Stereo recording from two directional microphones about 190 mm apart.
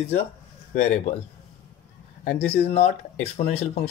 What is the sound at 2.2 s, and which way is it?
Speech, 55° left (ahead or behind).